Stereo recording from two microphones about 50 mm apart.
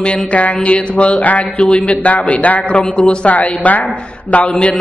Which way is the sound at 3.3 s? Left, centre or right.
Left.